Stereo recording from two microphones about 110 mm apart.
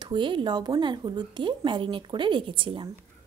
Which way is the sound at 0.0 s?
45° right (ahead or behind).